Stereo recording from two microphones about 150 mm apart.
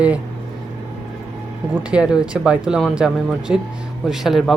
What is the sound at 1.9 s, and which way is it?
Speech, 5° right (ahead or behind).